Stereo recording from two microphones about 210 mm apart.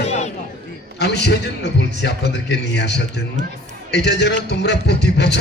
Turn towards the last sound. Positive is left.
turn(degrees=55)  # may be behind; listen again after turning